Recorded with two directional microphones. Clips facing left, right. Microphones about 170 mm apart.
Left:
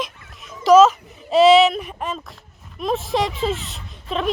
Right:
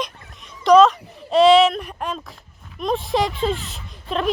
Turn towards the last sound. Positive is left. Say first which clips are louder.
# right 1 dB
turn(degrees=0)  # may be behind; listen again after turning